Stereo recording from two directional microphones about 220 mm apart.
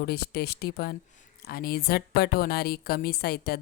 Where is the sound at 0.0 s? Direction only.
45° left (ahead or behind).